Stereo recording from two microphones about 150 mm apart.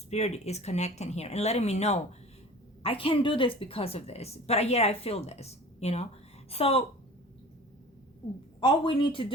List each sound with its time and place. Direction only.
0.1 s a woman's voice: 45° left (ahead or behind)
8.6 s speech: 35° left (ahead or behind)